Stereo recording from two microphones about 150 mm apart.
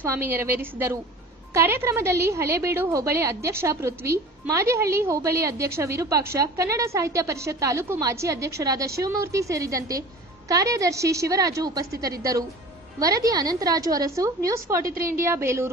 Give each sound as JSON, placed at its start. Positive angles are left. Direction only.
{"t": 0.1, "sound": "a woman's voice", "side_deg": -15}